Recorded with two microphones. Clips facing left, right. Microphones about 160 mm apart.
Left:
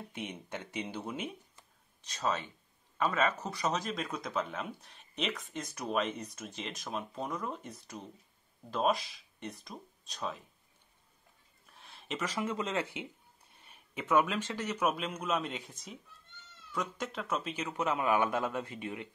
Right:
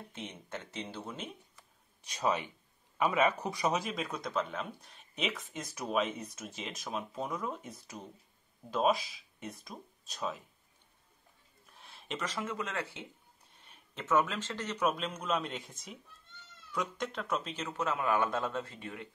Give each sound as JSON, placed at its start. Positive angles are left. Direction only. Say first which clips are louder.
{"t": 0.1, "sound": "a man's voice", "louder": "left 2 dB", "side_deg": 10}
{"t": 2.0, "sound": "speech", "louder": "right 2 dB", "side_deg": -10}
{"t": 11.6, "sound": "a sound", "louder": "even", "side_deg": 0}
{"t": 12.4, "sound": "a man's voice", "louder": "left 6 dB", "side_deg": 20}